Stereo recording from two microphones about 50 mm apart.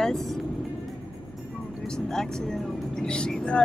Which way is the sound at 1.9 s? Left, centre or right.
Centre.